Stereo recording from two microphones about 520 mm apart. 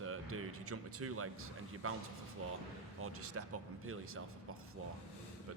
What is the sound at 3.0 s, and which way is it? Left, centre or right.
Speech, right.